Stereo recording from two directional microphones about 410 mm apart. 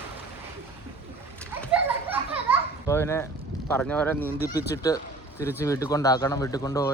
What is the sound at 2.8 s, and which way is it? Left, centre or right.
Speech, centre.